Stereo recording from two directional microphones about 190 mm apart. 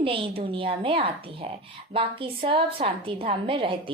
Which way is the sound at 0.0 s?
30° right (ahead or behind).